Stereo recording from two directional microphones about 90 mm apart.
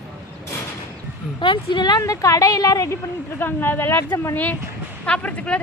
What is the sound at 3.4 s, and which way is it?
Speech, 25° left (ahead or behind).